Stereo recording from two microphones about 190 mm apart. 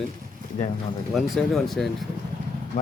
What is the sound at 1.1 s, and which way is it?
Speech, centre (ahead or behind).